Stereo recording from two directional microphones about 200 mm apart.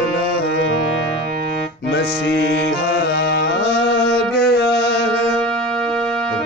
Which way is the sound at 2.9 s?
60° left (ahead or behind).